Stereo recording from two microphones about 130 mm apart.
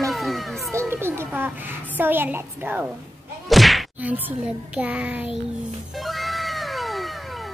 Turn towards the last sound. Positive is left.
turn(degrees=0)  # may be behind; listen again after turning